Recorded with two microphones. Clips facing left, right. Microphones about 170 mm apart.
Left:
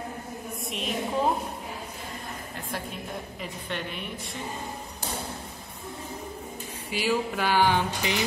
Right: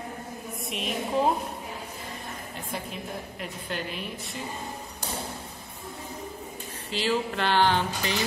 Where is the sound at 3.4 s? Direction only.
Centre (ahead or behind).